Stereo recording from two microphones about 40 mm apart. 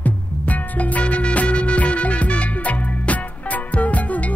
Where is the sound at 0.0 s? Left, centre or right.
Left.